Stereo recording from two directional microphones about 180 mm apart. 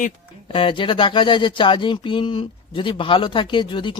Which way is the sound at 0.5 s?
30° left (ahead or behind).